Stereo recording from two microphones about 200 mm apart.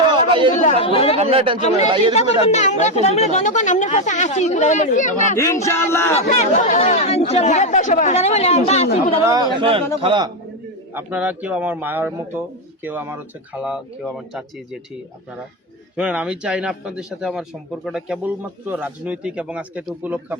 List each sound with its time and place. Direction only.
0.1 s chatter: 25° right (ahead or behind)
0.6 s speech: 30° left (ahead or behind)
1.1 s speech: 30° right (ahead or behind)
2.1 s speech: 35° left (ahead or behind)
5.4 s a sound: 15° left (ahead or behind)
6.2 s speech: 40° left (ahead or behind)
9.2 s speech: 20° right (ahead or behind)
10.9 s speech: 10° right (ahead or behind)
16.0 s a man's voice: 5° right (ahead or behind)